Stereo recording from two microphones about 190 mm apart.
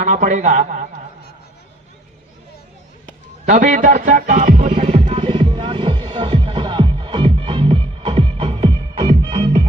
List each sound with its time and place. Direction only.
0.0 s a man's voice: 40° right (ahead or behind)
3.4 s music: 40° right (ahead or behind)